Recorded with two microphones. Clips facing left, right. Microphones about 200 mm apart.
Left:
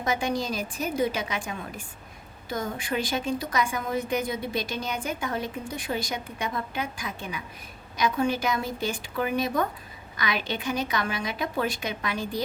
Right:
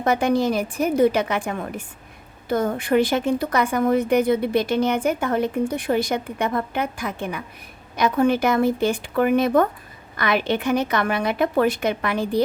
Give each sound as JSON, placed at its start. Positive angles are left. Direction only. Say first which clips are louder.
{"t": 0.0, "sound": "a woman's voice", "louder": "right 8 dB", "side_deg": -60}